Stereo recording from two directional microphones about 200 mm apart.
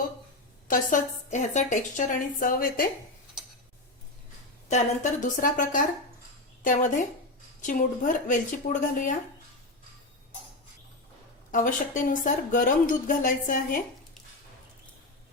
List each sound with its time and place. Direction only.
0.7 s speech: 40° left (ahead or behind)
5.2 s speech: 40° left (ahead or behind)
11.5 s speech: 40° left (ahead or behind)